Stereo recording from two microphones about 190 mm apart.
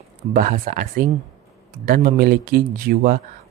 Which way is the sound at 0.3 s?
45° right (ahead or behind).